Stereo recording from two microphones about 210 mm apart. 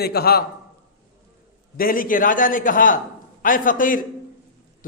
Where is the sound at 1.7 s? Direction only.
45° left (ahead or behind).